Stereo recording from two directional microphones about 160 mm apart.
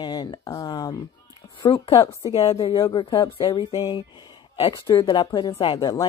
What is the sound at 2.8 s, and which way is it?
Speech, 25° left (ahead or behind).